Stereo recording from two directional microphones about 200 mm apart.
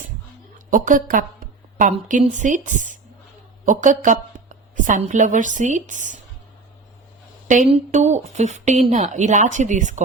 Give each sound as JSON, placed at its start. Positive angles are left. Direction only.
{"t": 0.7, "sound": "a woman's voice", "side_deg": -40}
{"t": 7.4, "sound": "speech", "side_deg": -40}